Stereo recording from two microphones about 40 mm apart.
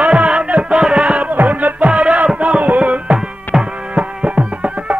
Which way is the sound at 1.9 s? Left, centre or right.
Centre.